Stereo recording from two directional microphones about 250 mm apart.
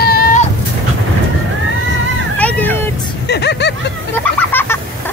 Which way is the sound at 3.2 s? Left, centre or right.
Left.